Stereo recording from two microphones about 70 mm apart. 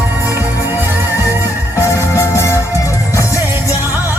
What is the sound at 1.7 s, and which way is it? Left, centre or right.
Music, left.